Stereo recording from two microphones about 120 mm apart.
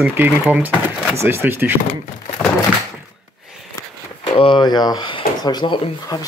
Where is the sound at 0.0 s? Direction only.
15° right (ahead or behind).